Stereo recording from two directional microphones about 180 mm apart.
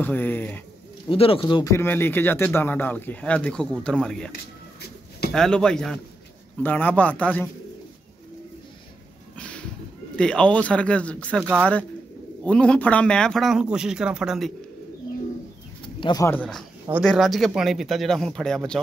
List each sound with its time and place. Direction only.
0.0 s speech: 10° left (ahead or behind)
1.0 s speech: 30° left (ahead or behind)
1.5 s speech: 20° left (ahead or behind)
5.3 s speech: 5° left (ahead or behind)
10.1 s speech: 5° left (ahead or behind)
12.4 s speech: 5° left (ahead or behind)
16.0 s speech: 25° left (ahead or behind)
16.3 s speech: 5° left (ahead or behind)